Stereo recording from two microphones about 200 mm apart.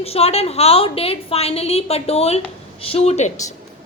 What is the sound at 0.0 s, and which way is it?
A woman's voice, 30° left (ahead or behind).